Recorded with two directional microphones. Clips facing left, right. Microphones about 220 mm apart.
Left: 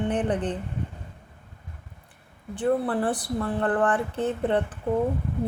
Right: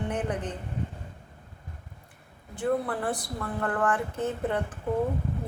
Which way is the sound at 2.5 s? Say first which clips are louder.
Left 4 dB; 35° left (ahead or behind).